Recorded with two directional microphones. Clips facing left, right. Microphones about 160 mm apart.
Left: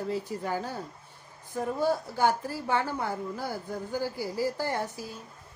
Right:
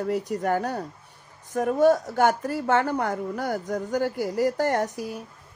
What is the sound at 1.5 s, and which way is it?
A woman's voice, 75° right (ahead or behind).